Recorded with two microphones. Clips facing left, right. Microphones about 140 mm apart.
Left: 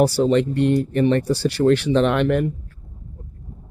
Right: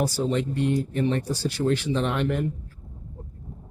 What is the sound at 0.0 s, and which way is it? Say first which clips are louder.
Speech: left 8 dB; 70° left (ahead or behind).